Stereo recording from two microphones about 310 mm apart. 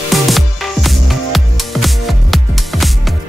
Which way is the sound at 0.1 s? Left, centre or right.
Centre.